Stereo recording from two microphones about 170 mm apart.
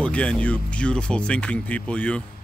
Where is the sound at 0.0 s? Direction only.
5° left (ahead or behind).